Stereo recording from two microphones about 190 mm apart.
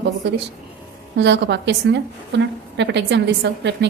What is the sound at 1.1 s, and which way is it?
A woman's voice, 65° right (ahead or behind).